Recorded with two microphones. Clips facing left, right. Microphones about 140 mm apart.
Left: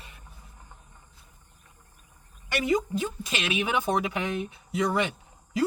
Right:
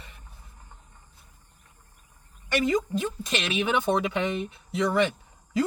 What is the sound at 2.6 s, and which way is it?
Speech, 15° left (ahead or behind).